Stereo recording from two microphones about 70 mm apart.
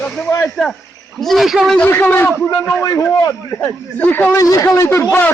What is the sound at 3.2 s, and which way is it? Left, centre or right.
Speech, left.